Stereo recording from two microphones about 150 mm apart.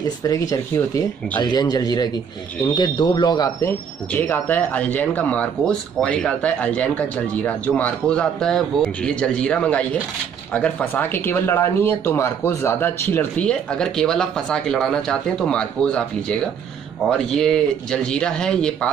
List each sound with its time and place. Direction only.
0.3 s speech: 20° left (ahead or behind)
3.6 s speech: 10° left (ahead or behind)